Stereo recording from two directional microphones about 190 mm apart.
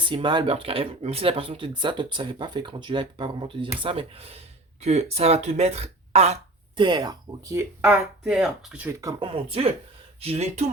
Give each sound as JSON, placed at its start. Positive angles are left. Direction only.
{"t": 0.0, "sound": "speech", "side_deg": -25}
{"t": 6.8, "sound": "speech", "side_deg": -20}
{"t": 7.8, "sound": "speech", "side_deg": -5}
{"t": 9.3, "sound": "speech", "side_deg": -30}